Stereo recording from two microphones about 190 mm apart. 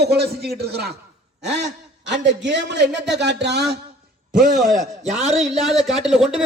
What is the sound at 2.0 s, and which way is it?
A man's voice, 70° right (ahead or behind).